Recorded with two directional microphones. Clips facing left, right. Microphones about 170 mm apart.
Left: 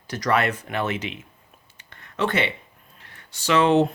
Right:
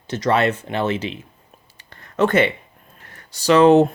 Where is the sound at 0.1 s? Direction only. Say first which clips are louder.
Right 4 dB; 25° right (ahead or behind).